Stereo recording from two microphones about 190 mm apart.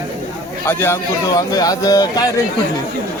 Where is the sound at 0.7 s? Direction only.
10° left (ahead or behind).